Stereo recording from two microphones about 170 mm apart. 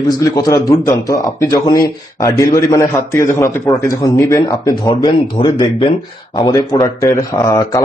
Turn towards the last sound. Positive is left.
turn(degrees=20)  # may be behind; listen again after turning